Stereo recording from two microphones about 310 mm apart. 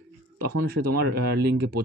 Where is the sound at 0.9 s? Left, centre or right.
Right.